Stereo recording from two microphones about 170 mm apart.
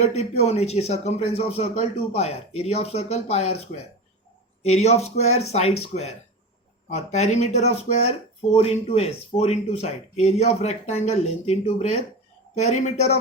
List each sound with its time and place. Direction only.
0.0 s a man's voice: 40° left (ahead or behind)
4.6 s a man's voice: 40° left (ahead or behind)